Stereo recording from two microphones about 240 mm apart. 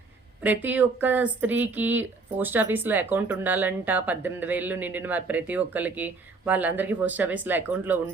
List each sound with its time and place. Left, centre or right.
0.4 s speech: centre